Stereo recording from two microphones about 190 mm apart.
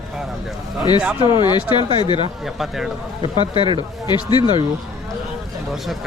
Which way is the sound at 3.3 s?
25° left (ahead or behind).